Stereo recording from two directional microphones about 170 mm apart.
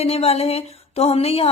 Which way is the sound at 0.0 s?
35° left (ahead or behind).